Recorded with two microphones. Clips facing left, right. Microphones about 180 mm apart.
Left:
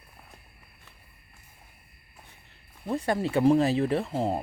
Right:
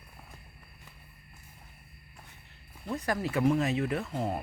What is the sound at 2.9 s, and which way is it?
Speech, 30° left (ahead or behind).